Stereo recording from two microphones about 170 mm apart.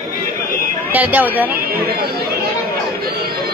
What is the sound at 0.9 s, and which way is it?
Speech, 10° right (ahead or behind).